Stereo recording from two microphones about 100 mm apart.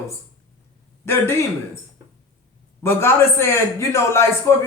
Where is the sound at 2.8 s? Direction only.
25° left (ahead or behind).